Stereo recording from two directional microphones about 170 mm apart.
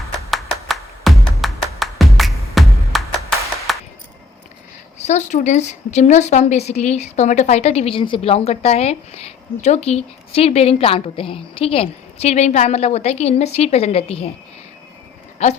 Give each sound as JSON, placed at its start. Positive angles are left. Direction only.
{"t": 0.3, "sound": "music", "side_deg": 0}
{"t": 3.7, "sound": "coin", "side_deg": 0}
{"t": 4.9, "sound": "a woman's voice", "side_deg": 45}